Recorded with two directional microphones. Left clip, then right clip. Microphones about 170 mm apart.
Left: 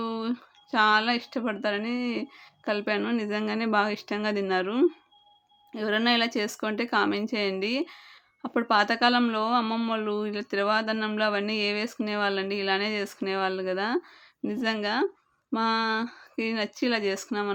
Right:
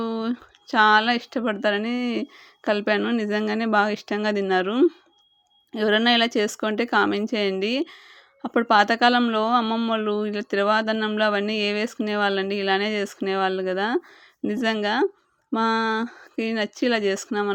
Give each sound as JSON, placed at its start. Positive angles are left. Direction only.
{"t": 0.0, "sound": "a woman's voice", "side_deg": -30}